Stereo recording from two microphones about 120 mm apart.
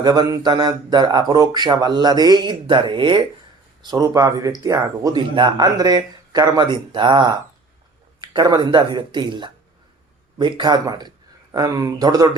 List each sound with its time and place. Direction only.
0.0 s speech: 35° right (ahead or behind)
3.8 s speech: 30° right (ahead or behind)
5.3 s speech: 40° right (ahead or behind)